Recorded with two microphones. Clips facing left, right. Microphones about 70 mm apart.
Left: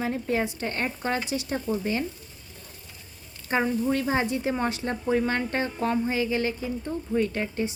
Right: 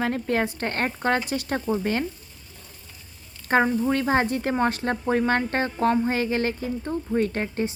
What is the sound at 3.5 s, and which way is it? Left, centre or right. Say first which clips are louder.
Speech: right 4 dB; right.